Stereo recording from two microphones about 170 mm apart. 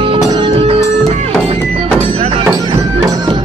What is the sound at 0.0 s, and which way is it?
Music, 30° right (ahead or behind).